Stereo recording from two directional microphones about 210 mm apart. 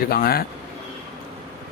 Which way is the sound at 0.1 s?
45° left (ahead or behind).